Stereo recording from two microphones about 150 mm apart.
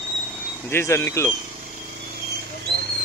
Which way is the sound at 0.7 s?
15° left (ahead or behind).